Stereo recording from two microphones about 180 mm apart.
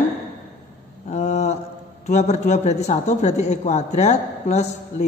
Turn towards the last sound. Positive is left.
turn(degrees=40)  # may be behind; listen again after turning